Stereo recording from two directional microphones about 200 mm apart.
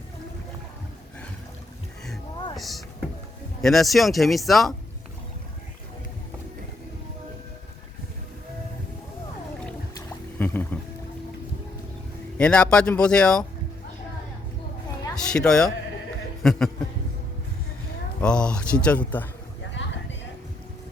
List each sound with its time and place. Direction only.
2.6 s speech: centre (ahead or behind)
10.3 s music: 10° left (ahead or behind)
12.4 s speech: 5° left (ahead or behind)
15.1 s speech: 5° left (ahead or behind)
18.2 s speech: 5° left (ahead or behind)
19.8 s music: 65° left (ahead or behind)